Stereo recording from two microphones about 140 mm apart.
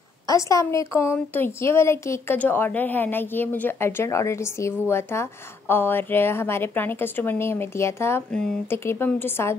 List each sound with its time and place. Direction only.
0.3 s a woman's voice: 25° left (ahead or behind)
8.3 s a woman's voice: 5° left (ahead or behind)
8.6 s a woman's voice: 15° left (ahead or behind)